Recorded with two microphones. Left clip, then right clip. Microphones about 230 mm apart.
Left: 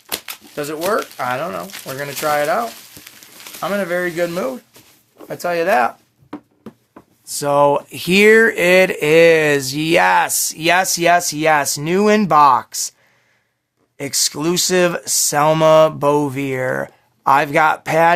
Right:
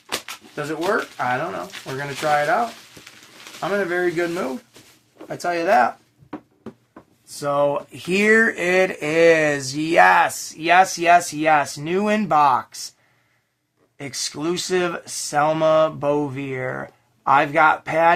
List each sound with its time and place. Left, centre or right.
0.1 s speech: left
5.1 s speech: left
6.3 s a sound: left
7.3 s speech: left
14.0 s speech: left